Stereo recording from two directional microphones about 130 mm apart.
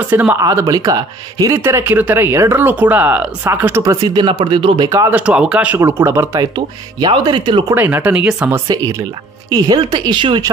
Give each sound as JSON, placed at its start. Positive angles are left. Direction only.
{"t": 0.1, "sound": "speech", "side_deg": -15}
{"t": 0.4, "sound": "speech", "side_deg": -30}
{"t": 4.8, "sound": "speech", "side_deg": -25}
{"t": 5.1, "sound": "speech", "side_deg": -10}
{"t": 6.5, "sound": "speech", "side_deg": -35}
{"t": 7.7, "sound": "speech", "side_deg": -15}
{"t": 8.6, "sound": "speech", "side_deg": -30}